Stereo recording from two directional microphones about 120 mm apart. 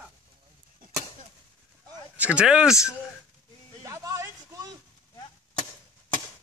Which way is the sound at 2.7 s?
25° left (ahead or behind).